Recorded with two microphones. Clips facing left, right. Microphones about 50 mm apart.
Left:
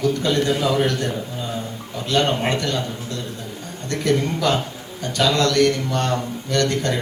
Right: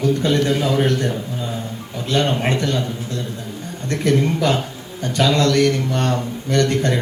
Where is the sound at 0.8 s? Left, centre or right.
Right.